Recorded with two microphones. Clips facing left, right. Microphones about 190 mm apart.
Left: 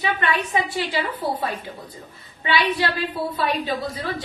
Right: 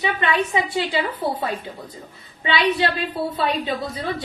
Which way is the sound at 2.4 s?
20° right (ahead or behind).